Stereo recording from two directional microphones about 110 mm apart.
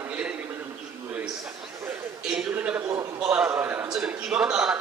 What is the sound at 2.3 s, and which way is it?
Speech, 5° right (ahead or behind).